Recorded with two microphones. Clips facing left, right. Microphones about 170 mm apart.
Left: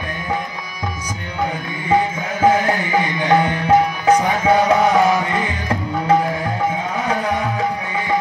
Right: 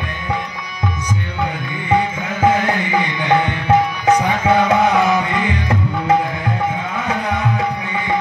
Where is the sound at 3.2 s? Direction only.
40° left (ahead or behind).